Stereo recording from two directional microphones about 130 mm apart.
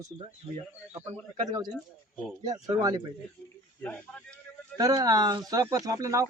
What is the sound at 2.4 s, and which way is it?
Speech, 30° right (ahead or behind).